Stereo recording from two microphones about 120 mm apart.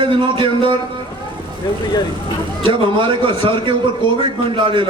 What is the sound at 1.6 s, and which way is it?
Speech, 35° left (ahead or behind).